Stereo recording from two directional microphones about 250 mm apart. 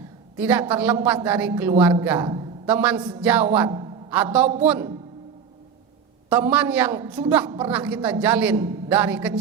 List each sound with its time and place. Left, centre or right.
0.3 s a woman's voice: centre
2.2 s a sound: centre
2.6 s a woman's voice: centre
3.7 s a sound: centre
4.1 s a woman's voice: centre
6.3 s a woman's voice: centre